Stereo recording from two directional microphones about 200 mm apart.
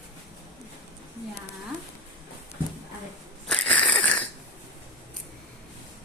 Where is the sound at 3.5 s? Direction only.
5° left (ahead or behind).